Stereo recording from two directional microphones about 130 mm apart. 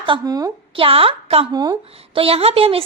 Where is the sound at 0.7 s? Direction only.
45° right (ahead or behind).